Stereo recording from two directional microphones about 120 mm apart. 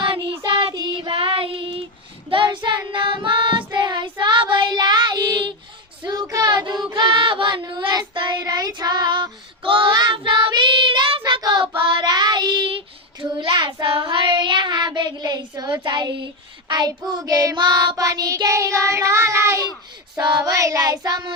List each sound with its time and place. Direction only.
0.0 s child singing: 45° right (ahead or behind)
11.2 s child singing: 35° right (ahead or behind)